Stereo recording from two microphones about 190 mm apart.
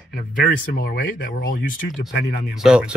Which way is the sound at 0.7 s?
50° left (ahead or behind).